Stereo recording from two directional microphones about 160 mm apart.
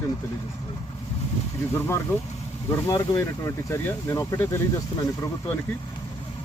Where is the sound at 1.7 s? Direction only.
15° left (ahead or behind).